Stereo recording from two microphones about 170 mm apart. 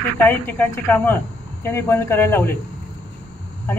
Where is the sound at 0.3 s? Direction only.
15° left (ahead or behind).